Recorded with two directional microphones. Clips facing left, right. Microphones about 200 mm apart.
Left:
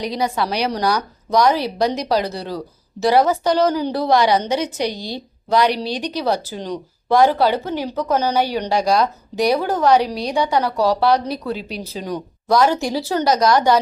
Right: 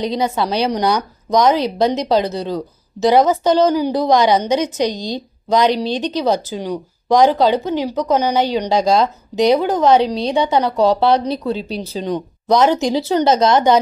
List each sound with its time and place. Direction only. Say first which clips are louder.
0.0 s a woman's voice: right 3 dB; 25° right (ahead or behind)